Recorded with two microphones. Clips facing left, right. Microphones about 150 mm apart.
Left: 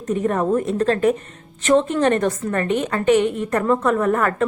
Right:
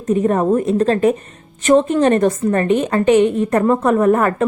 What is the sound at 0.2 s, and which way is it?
A woman's voice, 20° right (ahead or behind).